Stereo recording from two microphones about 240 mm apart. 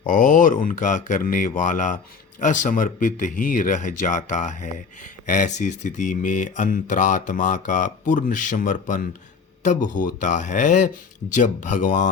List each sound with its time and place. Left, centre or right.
0.0 s speech: left